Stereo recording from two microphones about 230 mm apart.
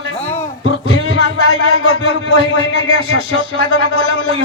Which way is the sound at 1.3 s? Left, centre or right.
Left.